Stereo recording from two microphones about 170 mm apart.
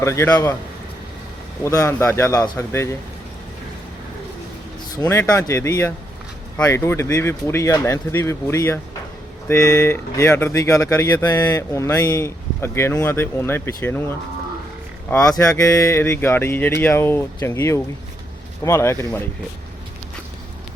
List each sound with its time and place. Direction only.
0.0 s speech: 15° left (ahead or behind)
1.6 s speech: 15° left (ahead or behind)
4.9 s speech: 15° left (ahead or behind)
15.2 s speech: 20° left (ahead or behind)